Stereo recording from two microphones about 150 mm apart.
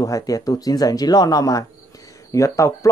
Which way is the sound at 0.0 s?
20° left (ahead or behind).